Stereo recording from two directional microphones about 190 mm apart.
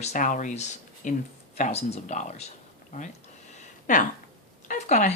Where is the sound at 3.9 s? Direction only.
45° left (ahead or behind).